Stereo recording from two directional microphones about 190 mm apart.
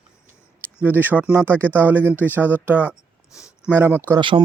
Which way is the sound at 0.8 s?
10° right (ahead or behind).